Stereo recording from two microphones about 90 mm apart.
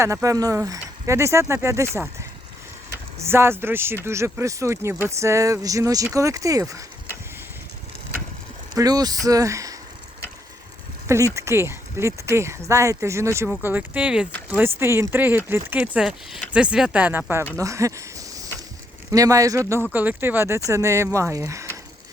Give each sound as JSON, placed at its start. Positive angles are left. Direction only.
{"t": 0.0, "sound": "speech", "side_deg": -35}
{"t": 8.7, "sound": "speech", "side_deg": -45}
{"t": 11.3, "sound": "speech", "side_deg": -30}
{"t": 13.6, "sound": "speech", "side_deg": -20}
{"t": 14.5, "sound": "speech", "side_deg": -25}
{"t": 17.6, "sound": "speech", "side_deg": -35}
{"t": 19.9, "sound": "speech", "side_deg": -20}